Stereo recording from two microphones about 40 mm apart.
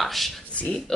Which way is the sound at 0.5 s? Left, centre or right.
Left.